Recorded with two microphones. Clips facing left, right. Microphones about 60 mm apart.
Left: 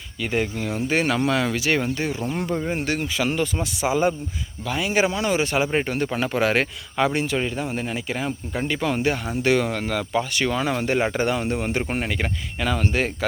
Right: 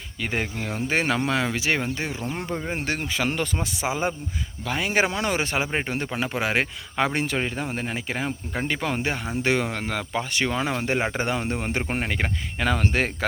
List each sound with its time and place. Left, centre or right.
0.2 s speech: right
3.6 s speech: right
4.7 s speech: right
5.7 s speech: right
6.1 s speech: centre
6.9 s speech: right